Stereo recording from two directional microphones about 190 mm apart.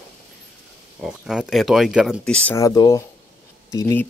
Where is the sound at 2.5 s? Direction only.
20° left (ahead or behind).